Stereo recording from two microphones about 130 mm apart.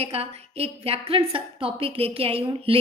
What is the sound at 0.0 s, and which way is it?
A woman's voice, 50° right (ahead or behind).